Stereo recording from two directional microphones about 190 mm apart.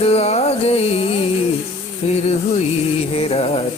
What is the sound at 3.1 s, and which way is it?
Music, 30° left (ahead or behind).